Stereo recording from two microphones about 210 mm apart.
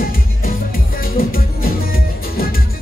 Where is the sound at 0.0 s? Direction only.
45° left (ahead or behind).